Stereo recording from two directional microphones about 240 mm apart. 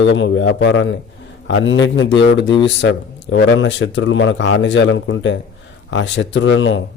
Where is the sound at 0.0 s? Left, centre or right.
Left.